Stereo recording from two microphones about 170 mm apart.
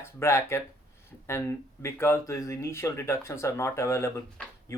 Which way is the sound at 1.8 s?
15° left (ahead or behind).